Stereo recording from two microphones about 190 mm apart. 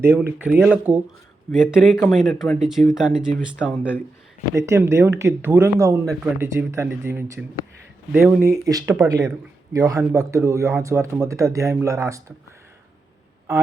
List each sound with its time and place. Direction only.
0.0 s speech: 10° right (ahead or behind)
1.5 s speech: 10° left (ahead or behind)
4.5 s speech: 15° right (ahead or behind)